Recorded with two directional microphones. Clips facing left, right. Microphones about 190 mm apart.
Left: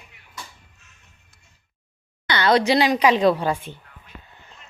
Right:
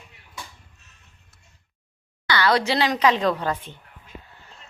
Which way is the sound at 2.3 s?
20° left (ahead or behind).